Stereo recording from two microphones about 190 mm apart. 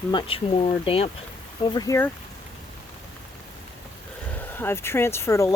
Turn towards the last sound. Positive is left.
turn(degrees=15)  # may be behind; listen again after turning